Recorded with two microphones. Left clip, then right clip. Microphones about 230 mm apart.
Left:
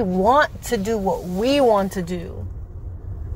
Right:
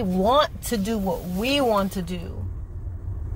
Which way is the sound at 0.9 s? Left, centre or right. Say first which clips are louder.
Left 5 dB; left.